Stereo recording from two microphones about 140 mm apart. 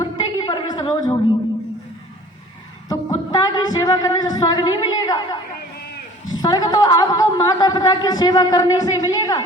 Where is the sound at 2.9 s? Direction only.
25° left (ahead or behind).